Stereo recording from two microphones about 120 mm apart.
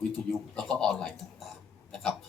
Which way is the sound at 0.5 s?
10° left (ahead or behind).